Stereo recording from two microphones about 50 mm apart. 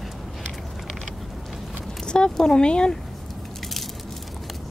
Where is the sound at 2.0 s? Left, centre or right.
Centre.